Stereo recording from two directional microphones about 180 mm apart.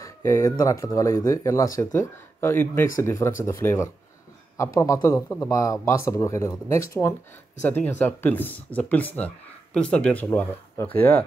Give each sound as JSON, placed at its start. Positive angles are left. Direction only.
{"t": 0.0, "sound": "speech", "side_deg": 15}